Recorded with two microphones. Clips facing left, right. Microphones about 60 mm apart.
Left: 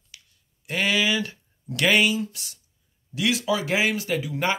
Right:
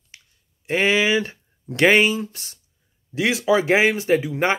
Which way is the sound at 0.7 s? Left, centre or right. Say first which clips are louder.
Right 5 dB; right.